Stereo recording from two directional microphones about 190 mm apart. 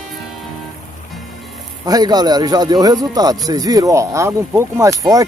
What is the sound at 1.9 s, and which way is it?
Speech, 20° right (ahead or behind).